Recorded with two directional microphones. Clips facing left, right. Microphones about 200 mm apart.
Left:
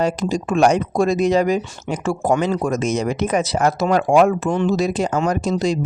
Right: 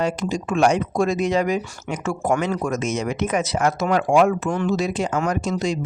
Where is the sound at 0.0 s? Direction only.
35° left (ahead or behind).